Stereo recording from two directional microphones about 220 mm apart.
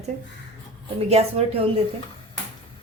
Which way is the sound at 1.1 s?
30° right (ahead or behind).